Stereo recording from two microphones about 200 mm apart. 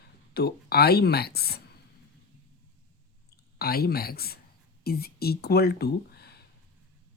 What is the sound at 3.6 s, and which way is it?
Speech, 50° left (ahead or behind).